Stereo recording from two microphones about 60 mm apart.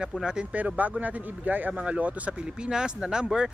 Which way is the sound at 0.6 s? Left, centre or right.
Right.